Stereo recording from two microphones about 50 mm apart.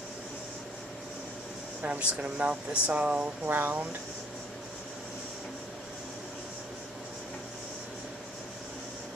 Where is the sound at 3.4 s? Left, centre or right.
Right.